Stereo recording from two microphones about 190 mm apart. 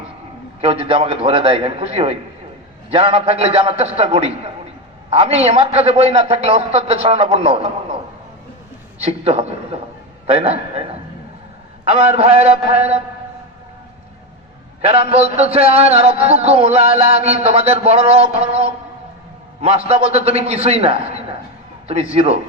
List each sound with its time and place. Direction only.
0.6 s a man's voice: 30° right (ahead or behind)
9.0 s a man's voice: 30° right (ahead or behind)
11.9 s a man's voice: 30° right (ahead or behind)
14.8 s a man's voice: 30° right (ahead or behind)